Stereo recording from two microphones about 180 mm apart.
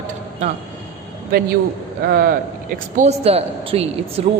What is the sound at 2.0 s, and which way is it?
Speech, 55° right (ahead or behind).